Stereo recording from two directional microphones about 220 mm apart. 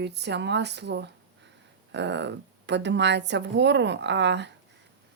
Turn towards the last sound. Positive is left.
turn(degrees=-50)  # may be behind; listen again after turning